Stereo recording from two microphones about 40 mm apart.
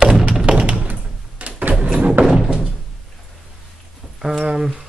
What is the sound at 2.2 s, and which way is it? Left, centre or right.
Music, centre.